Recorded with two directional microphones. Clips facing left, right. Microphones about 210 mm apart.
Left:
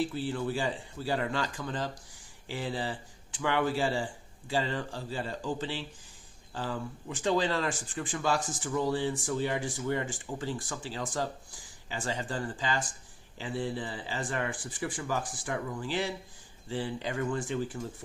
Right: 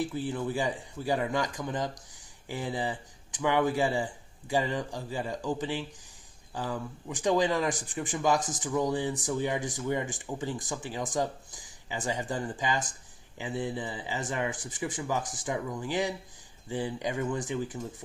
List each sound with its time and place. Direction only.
0.0 s speech: 15° right (ahead or behind)